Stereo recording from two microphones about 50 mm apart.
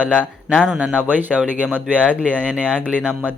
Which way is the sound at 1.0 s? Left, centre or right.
Right.